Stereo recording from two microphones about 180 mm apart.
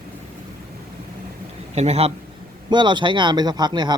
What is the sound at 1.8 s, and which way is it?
Speech, 35° right (ahead or behind).